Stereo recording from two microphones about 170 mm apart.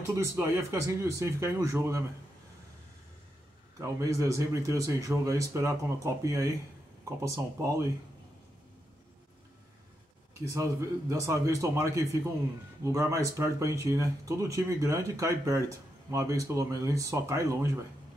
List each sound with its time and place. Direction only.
0.1 s speech: 15° right (ahead or behind)
3.8 s a man's voice: 20° right (ahead or behind)
10.4 s speech: 20° right (ahead or behind)